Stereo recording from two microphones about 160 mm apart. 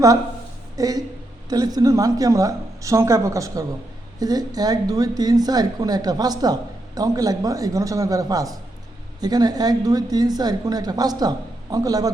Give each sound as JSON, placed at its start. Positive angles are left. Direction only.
{"t": 0.8, "sound": "speech", "side_deg": -20}